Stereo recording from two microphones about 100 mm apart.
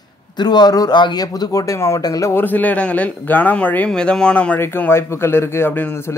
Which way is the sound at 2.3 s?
20° left (ahead or behind).